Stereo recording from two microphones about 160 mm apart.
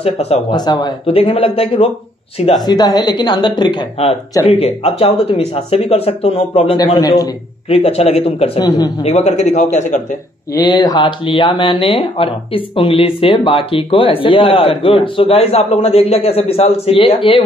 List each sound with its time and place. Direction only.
0.0 s speech: 40° left (ahead or behind)
0.5 s speech: 25° left (ahead or behind)
8.5 s speech: 25° left (ahead or behind)
9.0 s a man's voice: 45° left (ahead or behind)
10.5 s speech: 25° left (ahead or behind)